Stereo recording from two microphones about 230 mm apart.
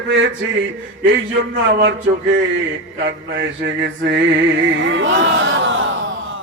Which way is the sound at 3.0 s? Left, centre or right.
Right.